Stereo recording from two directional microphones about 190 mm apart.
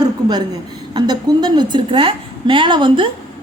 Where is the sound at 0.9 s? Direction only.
20° right (ahead or behind).